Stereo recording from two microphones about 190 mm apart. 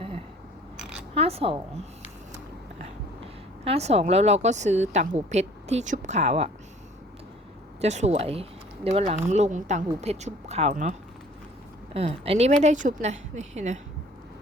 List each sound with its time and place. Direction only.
0.8 s a sound: 5° right (ahead or behind)
1.1 s speech: 30° right (ahead or behind)
3.6 s speech: 35° right (ahead or behind)
7.8 s speech: 35° right (ahead or behind)
11.9 s speech: 30° right (ahead or behind)